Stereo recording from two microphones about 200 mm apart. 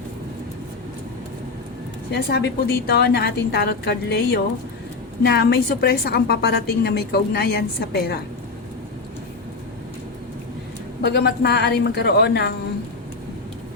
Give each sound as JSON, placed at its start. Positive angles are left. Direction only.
{"t": 2.1, "sound": "a woman's voice", "side_deg": 55}
{"t": 11.0, "sound": "speech", "side_deg": 55}